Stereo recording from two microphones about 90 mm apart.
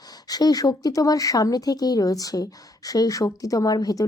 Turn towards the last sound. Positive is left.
turn(degrees=45)  # may be behind; listen again after turning